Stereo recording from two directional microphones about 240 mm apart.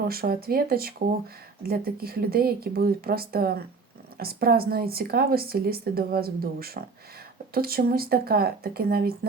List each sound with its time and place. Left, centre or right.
0.1 s speech: right